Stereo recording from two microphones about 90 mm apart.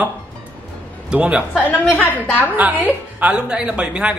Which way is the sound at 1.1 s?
10° right (ahead or behind).